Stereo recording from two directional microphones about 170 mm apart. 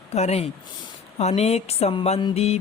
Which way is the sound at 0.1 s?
40° left (ahead or behind).